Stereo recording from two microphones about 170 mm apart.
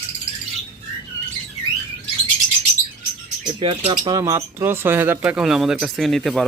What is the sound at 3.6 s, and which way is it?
Speech, 30° right (ahead or behind).